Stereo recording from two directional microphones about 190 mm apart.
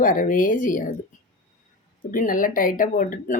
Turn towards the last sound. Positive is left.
turn(degrees=45)  # may be behind; listen again after turning